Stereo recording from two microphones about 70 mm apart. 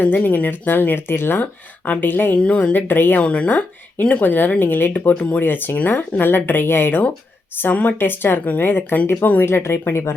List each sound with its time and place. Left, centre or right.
0.0 s speech: left
2.4 s speech: centre; by 10.2 s left